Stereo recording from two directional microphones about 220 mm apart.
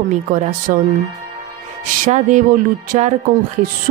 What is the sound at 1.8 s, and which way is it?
A woman's voice, 35° right (ahead or behind).